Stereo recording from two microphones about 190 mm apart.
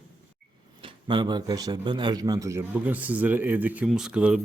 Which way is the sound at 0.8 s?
25° right (ahead or behind).